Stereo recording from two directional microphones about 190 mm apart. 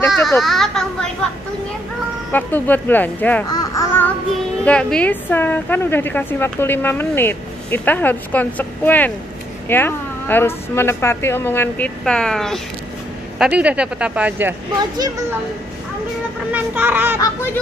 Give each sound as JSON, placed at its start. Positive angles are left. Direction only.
{"t": 0.3, "sound": "speech", "side_deg": 0}
{"t": 2.3, "sound": "a woman's voice", "side_deg": 10}
{"t": 3.4, "sound": "babbling", "side_deg": 20}
{"t": 4.6, "sound": "a woman's voice", "side_deg": 5}
{"t": 16.5, "sound": "speech", "side_deg": -10}